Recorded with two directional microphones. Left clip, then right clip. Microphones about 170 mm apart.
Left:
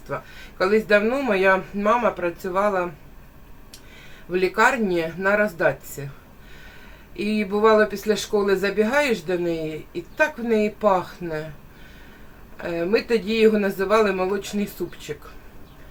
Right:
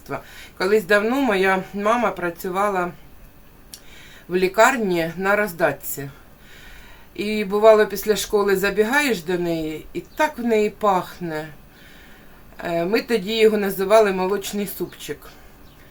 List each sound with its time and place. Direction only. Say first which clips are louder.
0.1 s speech: even; 35° right (ahead or behind)
4.3 s speech: right 3 dB; 35° right (ahead or behind)
7.2 s speech: right 2 dB; 35° right (ahead or behind)
12.6 s speech: right 1 dB; 35° right (ahead or behind)